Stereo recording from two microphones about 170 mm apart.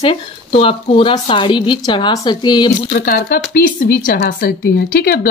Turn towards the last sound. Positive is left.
turn(degrees=65)  # may be behind; listen again after turning